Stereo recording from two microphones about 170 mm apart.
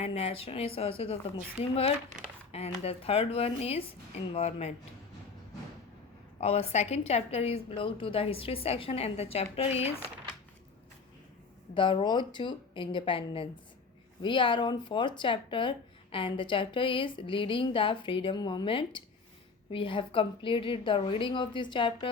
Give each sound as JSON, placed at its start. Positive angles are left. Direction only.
{"t": 0.0, "sound": "a woman's voice", "side_deg": 35}
{"t": 2.5, "sound": "a woman's voice", "side_deg": 35}
{"t": 6.4, "sound": "a woman's voice", "side_deg": 35}
{"t": 11.7, "sound": "a woman's voice", "side_deg": 30}